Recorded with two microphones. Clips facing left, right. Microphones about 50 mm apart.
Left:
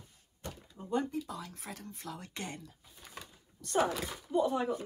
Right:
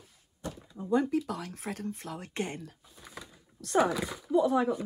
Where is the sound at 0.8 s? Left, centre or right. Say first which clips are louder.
Right 6 dB; right.